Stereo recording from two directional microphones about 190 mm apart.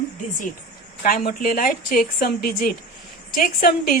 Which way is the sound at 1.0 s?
50° left (ahead or behind).